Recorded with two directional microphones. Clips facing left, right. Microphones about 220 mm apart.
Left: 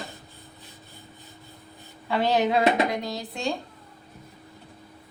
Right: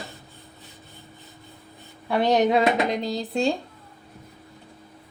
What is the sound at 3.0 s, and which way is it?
Speech, 30° right (ahead or behind).